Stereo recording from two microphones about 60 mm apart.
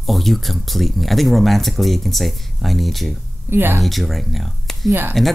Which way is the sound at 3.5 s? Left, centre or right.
Right.